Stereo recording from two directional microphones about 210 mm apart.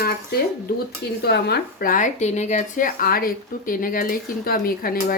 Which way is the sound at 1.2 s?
50° left (ahead or behind).